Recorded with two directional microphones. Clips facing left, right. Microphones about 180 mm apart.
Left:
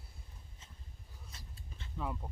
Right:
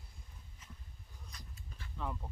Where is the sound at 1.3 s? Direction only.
25° left (ahead or behind).